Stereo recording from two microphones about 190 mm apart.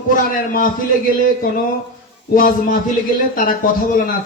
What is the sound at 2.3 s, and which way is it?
Speech, 45° left (ahead or behind).